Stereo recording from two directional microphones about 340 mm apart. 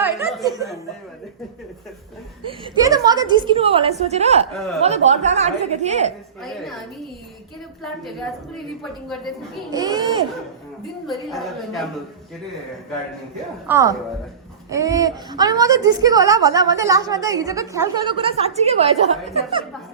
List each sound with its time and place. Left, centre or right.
0.0 s chuckle: centre
2.4 s a woman's voice: centre
4.5 s a woman's voice: centre
4.8 s a woman's voice: centre
6.4 s a woman's voice: centre
8.5 s a woman's voice: centre
9.7 s a woman's voice: centre
11.0 s a woman's voice: centre
13.7 s a woman's voice: centre